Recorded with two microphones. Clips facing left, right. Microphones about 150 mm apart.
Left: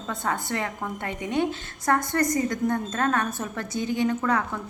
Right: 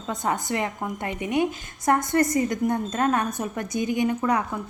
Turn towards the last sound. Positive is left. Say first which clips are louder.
# right 1 dB
turn(degrees=-20)  # may be behind; listen again after turning